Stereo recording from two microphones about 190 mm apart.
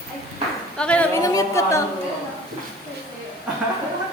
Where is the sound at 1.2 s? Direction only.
15° left (ahead or behind).